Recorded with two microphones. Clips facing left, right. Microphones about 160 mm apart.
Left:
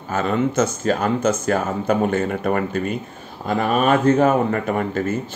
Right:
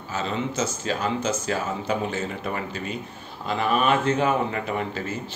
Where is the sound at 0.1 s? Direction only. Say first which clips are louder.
Left 8 dB; 55° left (ahead or behind).